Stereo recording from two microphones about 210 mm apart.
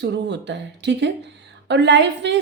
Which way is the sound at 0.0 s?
55° right (ahead or behind).